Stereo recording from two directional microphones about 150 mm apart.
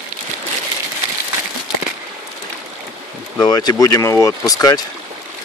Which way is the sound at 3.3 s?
25° left (ahead or behind).